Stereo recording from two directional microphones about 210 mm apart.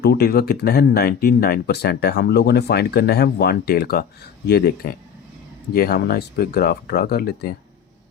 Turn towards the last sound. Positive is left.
turn(degrees=50)  # may be behind; listen again after turning